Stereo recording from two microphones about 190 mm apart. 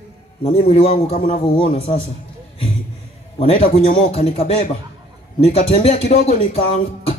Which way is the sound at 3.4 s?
30° left (ahead or behind).